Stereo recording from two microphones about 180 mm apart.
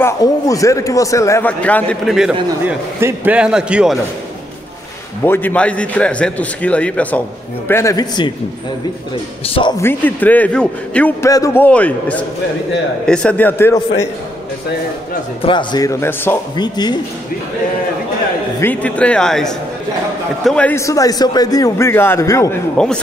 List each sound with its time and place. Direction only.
0.0 s a man's voice: 20° left (ahead or behind); by 4.0 s 5° right (ahead or behind)
5.2 s a man's voice: 10° left (ahead or behind)
9.5 s speech: 25° left (ahead or behind)
9.8 s a man's voice: 10° left (ahead or behind)
11.2 s a man's voice: 15° left (ahead or behind)
15.4 s a man's voice: 25° left (ahead or behind)
16.5 s speech: 25° left (ahead or behind)
18.6 s a man's voice: 10° left (ahead or behind)